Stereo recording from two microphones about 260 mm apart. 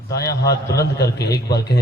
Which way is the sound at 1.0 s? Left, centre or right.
Left.